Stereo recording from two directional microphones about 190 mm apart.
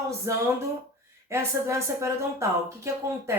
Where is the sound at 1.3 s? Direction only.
15° right (ahead or behind).